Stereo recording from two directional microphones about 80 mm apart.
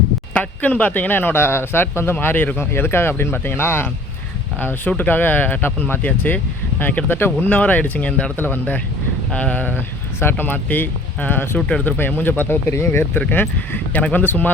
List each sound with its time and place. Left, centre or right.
0.3 s speech: left